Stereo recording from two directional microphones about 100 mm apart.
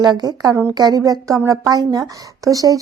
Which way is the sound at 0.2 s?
40° right (ahead or behind).